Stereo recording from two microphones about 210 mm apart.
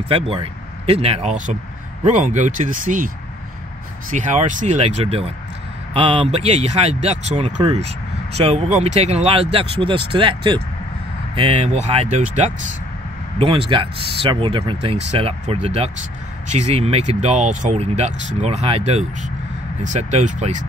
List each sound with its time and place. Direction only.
0.1 s speech: 25° right (ahead or behind)
4.1 s speech: 35° right (ahead or behind)